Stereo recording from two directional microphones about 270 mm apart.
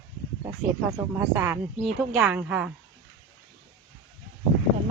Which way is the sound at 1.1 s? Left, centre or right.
Centre.